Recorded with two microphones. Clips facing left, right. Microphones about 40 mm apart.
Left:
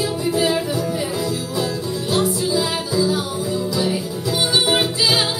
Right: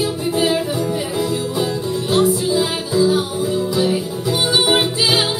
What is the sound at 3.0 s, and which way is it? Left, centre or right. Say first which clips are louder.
Music: right 4 dB; right.